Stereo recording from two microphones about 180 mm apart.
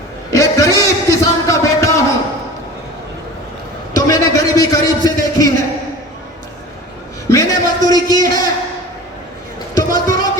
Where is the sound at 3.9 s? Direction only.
20° left (ahead or behind).